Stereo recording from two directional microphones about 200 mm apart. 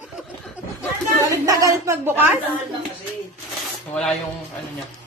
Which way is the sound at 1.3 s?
15° right (ahead or behind).